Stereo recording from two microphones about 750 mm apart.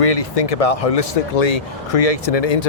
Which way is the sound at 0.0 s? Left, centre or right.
Left.